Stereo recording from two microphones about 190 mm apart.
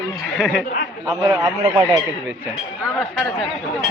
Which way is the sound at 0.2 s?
Centre (ahead or behind).